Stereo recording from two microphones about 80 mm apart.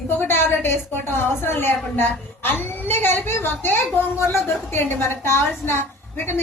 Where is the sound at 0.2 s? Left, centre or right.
Left.